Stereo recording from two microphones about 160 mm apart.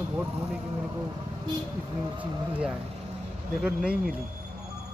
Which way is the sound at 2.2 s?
10° right (ahead or behind).